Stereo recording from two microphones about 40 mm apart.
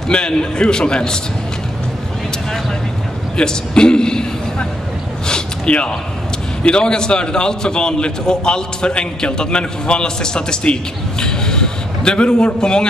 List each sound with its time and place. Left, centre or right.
0.1 s a man's voice: left
3.3 s a man's voice: left
5.3 s a sound: left
6.6 s a man's voice: left